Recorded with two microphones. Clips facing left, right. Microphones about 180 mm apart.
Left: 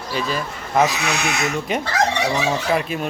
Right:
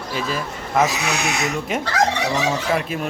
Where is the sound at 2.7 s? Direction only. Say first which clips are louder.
Left 1 dB; centre (ahead or behind).